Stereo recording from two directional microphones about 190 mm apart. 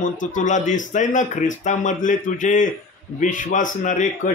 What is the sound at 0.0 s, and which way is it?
A man's voice, 40° left (ahead or behind).